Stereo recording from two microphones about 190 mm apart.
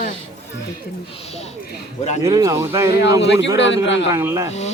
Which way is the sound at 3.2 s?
70° left (ahead or behind).